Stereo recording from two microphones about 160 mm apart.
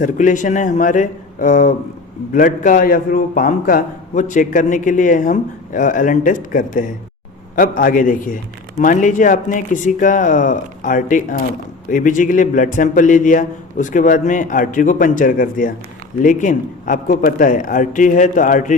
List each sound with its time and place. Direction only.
0.0 s a man's voice: 55° left (ahead or behind)